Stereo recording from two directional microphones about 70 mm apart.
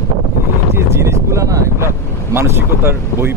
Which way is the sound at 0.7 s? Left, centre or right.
Right.